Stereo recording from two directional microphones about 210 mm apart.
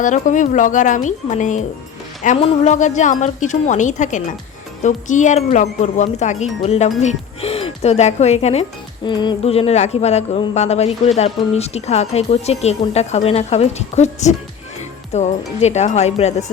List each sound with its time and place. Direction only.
0.0 s speech: 35° left (ahead or behind)